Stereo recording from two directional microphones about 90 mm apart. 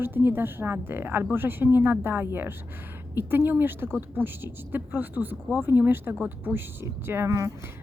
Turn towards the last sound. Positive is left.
turn(degrees=-30)  # may be behind; listen again after turning